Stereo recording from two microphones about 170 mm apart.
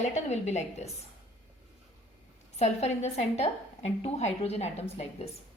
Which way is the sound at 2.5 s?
40° left (ahead or behind).